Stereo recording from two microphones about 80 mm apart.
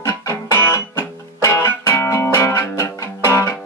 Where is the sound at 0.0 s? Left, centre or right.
Left.